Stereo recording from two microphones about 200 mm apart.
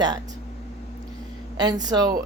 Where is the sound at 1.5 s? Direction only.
20° right (ahead or behind).